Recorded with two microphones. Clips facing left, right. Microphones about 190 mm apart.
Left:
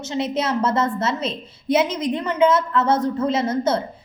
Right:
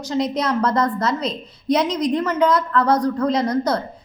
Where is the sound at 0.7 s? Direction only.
25° left (ahead or behind).